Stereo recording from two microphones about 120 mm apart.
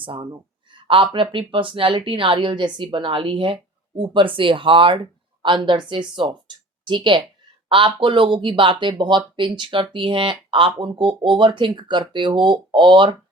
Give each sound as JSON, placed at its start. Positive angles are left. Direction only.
{"t": 0.0, "sound": "speech", "side_deg": -45}